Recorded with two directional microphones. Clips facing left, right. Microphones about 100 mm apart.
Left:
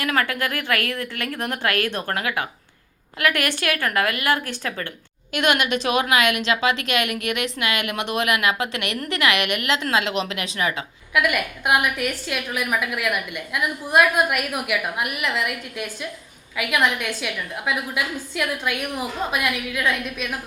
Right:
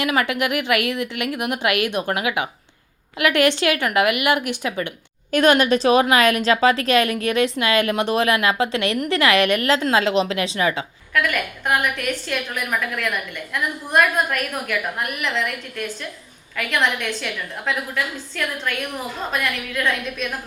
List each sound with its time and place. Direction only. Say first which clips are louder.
0.0 s a woman's voice: right 2 dB; 20° right (ahead or behind)
5.3 s a woman's voice: right 5 dB; 35° right (ahead or behind)
11.1 s a woman's voice: left 1 dB; 10° left (ahead or behind)